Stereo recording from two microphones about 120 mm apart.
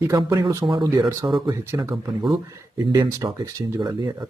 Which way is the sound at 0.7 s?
40° right (ahead or behind).